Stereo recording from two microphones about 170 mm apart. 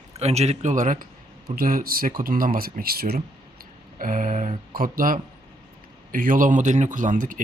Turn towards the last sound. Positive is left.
turn(degrees=-50)  # may be behind; listen again after turning